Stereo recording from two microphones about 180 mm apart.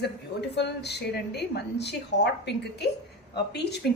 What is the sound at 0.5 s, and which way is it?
A woman's voice, 70° left (ahead or behind).